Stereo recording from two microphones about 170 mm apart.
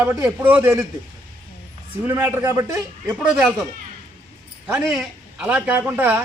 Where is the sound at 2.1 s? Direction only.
15° right (ahead or behind).